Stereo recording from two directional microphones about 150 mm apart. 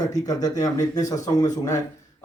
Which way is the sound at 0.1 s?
25° left (ahead or behind).